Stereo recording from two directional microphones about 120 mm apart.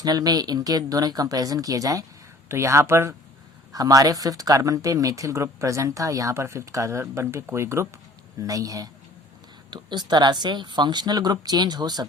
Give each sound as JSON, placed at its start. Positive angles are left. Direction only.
{"t": 0.0, "sound": "speech", "side_deg": -35}